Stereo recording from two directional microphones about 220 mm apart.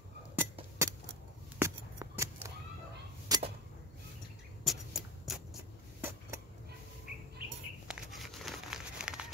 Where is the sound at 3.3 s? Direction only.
15° right (ahead or behind).